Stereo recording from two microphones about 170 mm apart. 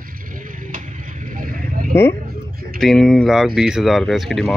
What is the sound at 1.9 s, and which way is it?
Speech, 15° left (ahead or behind).